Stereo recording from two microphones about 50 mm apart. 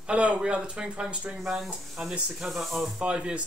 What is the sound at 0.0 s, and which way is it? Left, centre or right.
Speech, right.